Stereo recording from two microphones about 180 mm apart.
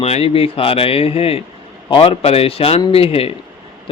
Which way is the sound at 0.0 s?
35° left (ahead or behind).